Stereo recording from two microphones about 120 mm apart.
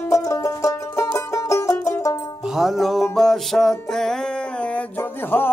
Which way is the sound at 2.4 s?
5° right (ahead or behind).